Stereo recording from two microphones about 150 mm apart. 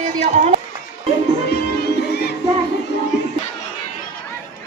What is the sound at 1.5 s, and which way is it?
Music, 90° left.